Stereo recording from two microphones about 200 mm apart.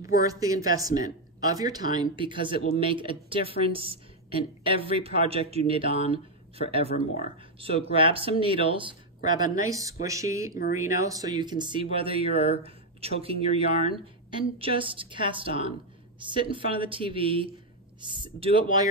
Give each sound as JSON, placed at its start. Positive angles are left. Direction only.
{"t": 0.0, "sound": "speech", "side_deg": -15}
{"t": 7.5, "sound": "speech", "side_deg": -30}